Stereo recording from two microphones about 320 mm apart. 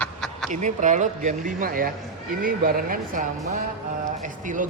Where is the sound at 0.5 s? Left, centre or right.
Right.